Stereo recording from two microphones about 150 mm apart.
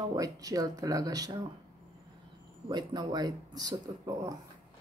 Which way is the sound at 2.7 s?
30° right (ahead or behind).